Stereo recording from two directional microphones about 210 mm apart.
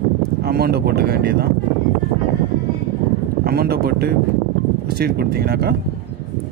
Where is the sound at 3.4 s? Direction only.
45° right (ahead or behind).